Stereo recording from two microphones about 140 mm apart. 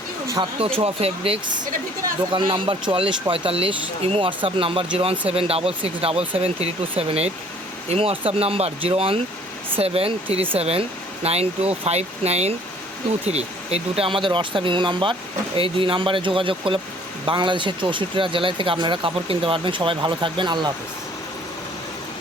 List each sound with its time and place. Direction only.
0.6 s speech: 40° right (ahead or behind)